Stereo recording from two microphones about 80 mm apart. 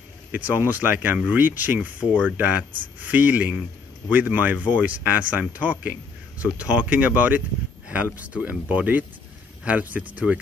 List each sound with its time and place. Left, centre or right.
0.3 s speech: right